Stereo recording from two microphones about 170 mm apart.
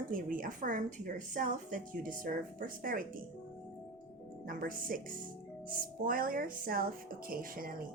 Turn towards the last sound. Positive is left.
turn(degrees=-55)  # may be behind; listen again after turning